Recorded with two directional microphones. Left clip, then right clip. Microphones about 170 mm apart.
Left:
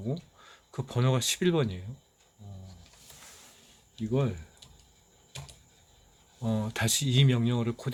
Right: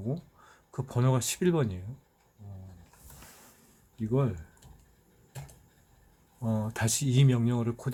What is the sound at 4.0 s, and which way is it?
Speech, 5° left (ahead or behind).